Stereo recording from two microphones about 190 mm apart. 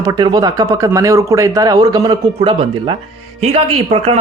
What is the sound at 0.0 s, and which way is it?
Speech, 20° right (ahead or behind).